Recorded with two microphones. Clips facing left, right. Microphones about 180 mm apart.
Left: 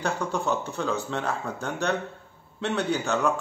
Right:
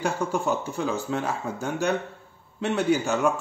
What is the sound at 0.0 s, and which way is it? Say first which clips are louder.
Speech: right 2 dB; 10° right (ahead or behind).